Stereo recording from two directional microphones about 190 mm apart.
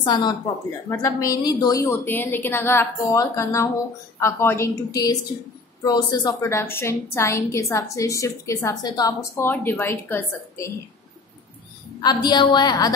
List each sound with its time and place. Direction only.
0.0 s a woman's voice: 25° left (ahead or behind)
12.0 s a woman's voice: 20° left (ahead or behind)